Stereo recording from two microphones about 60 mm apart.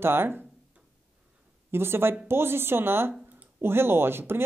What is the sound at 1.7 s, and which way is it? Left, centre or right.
Speech, right.